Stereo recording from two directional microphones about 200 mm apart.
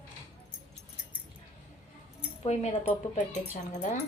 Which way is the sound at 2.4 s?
30° left (ahead or behind).